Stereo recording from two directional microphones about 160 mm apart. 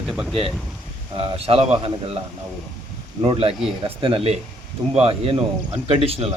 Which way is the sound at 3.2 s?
35° right (ahead or behind).